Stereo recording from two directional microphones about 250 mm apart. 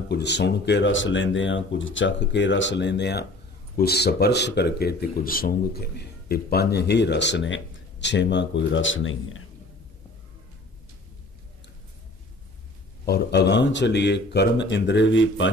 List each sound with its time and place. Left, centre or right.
0.1 s speech: left
13.0 s speech: left